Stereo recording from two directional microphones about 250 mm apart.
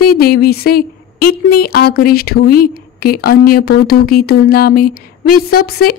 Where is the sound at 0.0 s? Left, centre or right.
Left.